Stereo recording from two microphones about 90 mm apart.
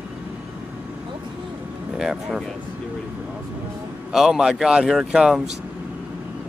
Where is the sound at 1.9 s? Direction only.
5° right (ahead or behind).